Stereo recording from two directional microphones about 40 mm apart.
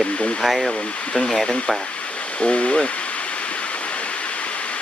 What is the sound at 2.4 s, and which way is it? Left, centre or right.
Speech, left.